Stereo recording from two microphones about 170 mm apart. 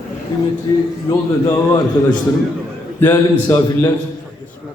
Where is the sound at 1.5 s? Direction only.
20° left (ahead or behind).